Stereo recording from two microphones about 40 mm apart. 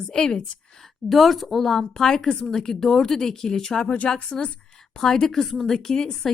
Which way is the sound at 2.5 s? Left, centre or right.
Centre.